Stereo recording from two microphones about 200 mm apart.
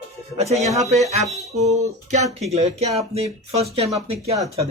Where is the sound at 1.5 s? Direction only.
35° right (ahead or behind).